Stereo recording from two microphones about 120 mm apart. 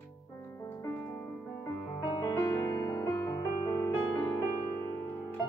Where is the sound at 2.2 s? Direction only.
30° left (ahead or behind).